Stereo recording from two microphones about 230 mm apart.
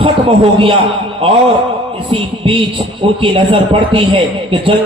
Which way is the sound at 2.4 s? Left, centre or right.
Right.